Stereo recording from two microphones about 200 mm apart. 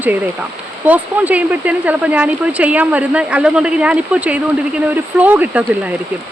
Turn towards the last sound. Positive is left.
turn(degrees=-5)  # may be behind; listen again after turning